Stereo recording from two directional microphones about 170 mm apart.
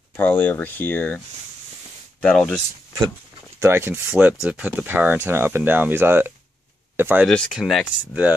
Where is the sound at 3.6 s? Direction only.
15° right (ahead or behind).